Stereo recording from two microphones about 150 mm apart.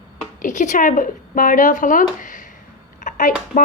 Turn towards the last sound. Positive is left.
turn(degrees=45)  # may be behind; listen again after turning